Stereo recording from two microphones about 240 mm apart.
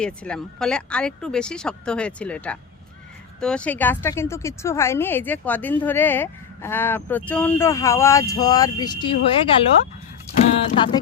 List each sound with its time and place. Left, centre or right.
0.0 s a woman's voice: centre; by 9.5 s left
10.8 s speech: centre